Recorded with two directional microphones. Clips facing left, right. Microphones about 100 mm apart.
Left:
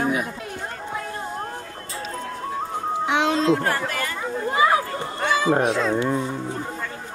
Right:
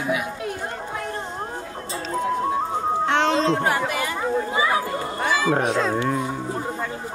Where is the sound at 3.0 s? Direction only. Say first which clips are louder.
Even; 10° left (ahead or behind).